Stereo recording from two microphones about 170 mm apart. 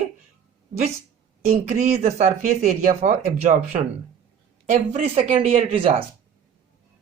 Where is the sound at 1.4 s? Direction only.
45° right (ahead or behind).